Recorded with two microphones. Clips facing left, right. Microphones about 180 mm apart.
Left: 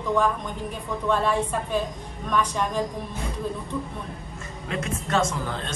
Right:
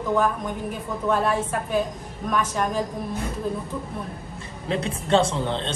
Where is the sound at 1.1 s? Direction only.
5° right (ahead or behind).